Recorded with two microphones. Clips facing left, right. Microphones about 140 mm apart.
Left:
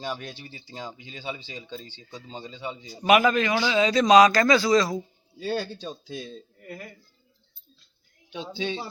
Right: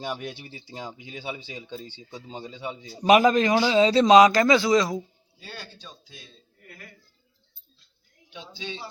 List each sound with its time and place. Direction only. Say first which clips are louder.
0.0 s speech: right 1 dB; 10° right (ahead or behind)
3.1 s a man's voice: right 2 dB; 35° right (ahead or behind); by 4.9 s 20° right (ahead or behind)
6.1 s speech: left 13 dB; 30° left (ahead or behind)
8.5 s speech: left 7 dB; 55° left (ahead or behind)